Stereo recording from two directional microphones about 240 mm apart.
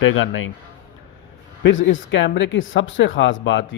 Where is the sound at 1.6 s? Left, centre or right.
Left.